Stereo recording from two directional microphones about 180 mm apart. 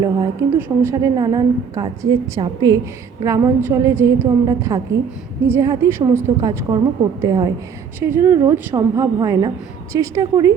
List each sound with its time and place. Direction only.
0.0 s a woman's voice: 20° right (ahead or behind)